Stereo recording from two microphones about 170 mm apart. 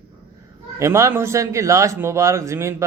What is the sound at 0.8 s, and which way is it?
Speech, 15° right (ahead or behind).